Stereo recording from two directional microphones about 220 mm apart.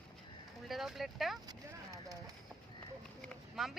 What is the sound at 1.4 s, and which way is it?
Clip-clop, 15° right (ahead or behind).